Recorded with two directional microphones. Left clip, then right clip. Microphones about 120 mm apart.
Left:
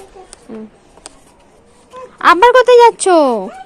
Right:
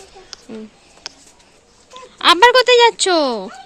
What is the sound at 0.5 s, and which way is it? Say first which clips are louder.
Speech: left 3 dB; 60° right (ahead or behind).